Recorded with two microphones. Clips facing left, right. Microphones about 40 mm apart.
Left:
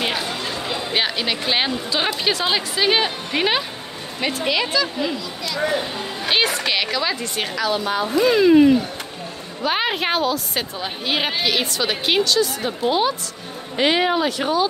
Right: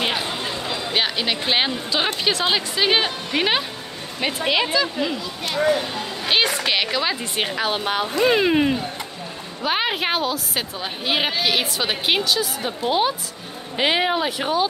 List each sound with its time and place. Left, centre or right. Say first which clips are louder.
0.2 s a sound: even; right
0.6 s a woman's voice: left 1 dB; centre
4.3 s speech: right 1 dB; right
6.2 s a woman's voice: even; centre
7.6 s speech: left 4 dB; right
9.6 s a woman's voice: left 1 dB; centre